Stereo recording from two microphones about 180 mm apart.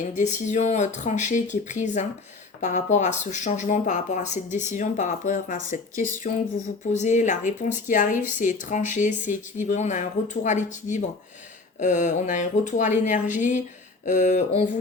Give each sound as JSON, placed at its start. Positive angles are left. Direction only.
{"t": 0.1, "sound": "speech", "side_deg": 45}